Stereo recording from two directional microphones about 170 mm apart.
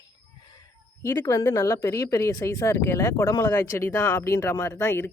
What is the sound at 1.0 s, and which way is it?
Speech, 15° left (ahead or behind).